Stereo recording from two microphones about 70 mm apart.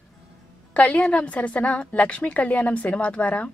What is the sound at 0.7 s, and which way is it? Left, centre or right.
A woman's voice, centre.